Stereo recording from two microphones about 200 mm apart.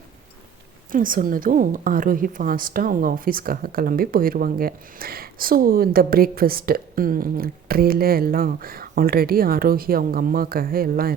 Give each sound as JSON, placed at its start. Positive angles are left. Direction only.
{"t": 0.9, "sound": "a woman's voice", "side_deg": -45}